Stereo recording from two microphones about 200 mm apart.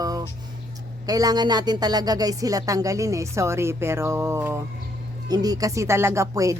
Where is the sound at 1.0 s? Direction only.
20° right (ahead or behind).